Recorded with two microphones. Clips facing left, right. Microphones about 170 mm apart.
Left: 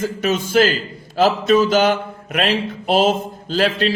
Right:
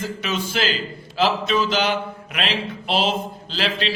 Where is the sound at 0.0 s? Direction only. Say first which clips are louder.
Left 6 dB; 45° left (ahead or behind).